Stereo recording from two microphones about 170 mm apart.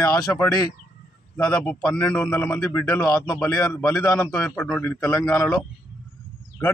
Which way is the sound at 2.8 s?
20° left (ahead or behind).